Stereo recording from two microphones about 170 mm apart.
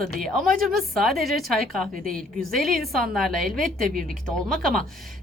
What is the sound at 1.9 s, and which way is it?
Speech, 55° right (ahead or behind).